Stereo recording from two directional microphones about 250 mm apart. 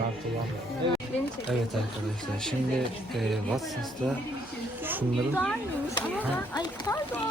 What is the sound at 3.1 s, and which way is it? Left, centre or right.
Speech, centre.